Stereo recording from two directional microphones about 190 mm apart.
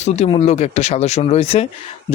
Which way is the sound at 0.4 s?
35° left (ahead or behind).